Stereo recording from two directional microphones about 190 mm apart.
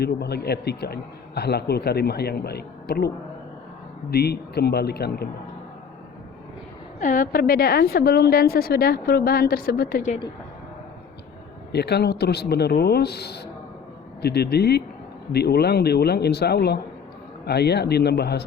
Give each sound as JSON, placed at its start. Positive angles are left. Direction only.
{"t": 0.0, "sound": "a man's voice", "side_deg": 60}
{"t": 4.1, "sound": "a man's voice", "side_deg": 55}
{"t": 7.0, "sound": "a woman's voice", "side_deg": 45}
{"t": 11.7, "sound": "a man's voice", "side_deg": 60}